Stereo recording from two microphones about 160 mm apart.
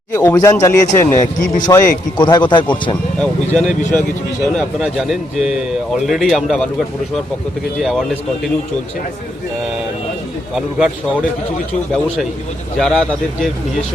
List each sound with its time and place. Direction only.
0.1 s speech: 20° left (ahead or behind)
1.4 s speech: 55° left (ahead or behind)
1.7 s speech: 25° left (ahead or behind)
3.2 s a man's voice: 5° left (ahead or behind)
10.5 s a man's voice: 5° right (ahead or behind)
12.8 s a man's voice: 5° left (ahead or behind)